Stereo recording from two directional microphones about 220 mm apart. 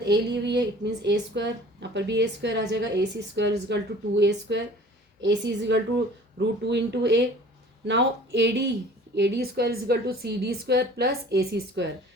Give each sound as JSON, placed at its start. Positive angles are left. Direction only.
{"t": 0.0, "sound": "a woman's voice", "side_deg": -50}